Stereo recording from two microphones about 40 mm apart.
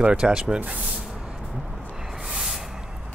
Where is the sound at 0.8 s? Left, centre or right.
Centre.